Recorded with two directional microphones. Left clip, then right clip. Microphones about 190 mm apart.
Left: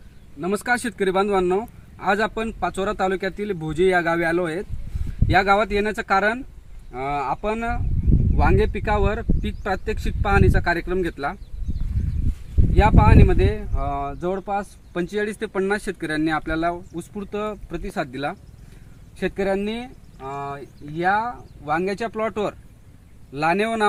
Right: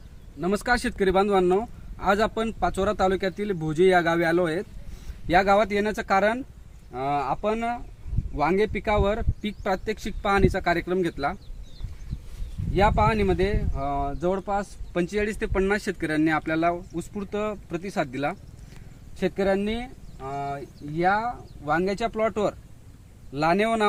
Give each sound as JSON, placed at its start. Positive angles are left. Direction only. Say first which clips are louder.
{"t": 0.3, "sound": "speech", "louder": "left 2 dB", "side_deg": -10}
{"t": 12.7, "sound": "speech", "louder": "left 3 dB", "side_deg": -15}